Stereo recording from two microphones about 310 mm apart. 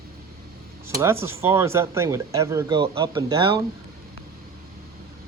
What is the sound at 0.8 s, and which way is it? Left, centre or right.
Speech, centre.